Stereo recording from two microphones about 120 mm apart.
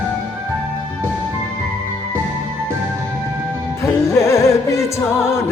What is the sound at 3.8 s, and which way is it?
Music, 25° left (ahead or behind).